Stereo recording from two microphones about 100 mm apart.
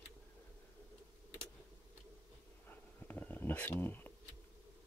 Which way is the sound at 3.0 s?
15° left (ahead or behind).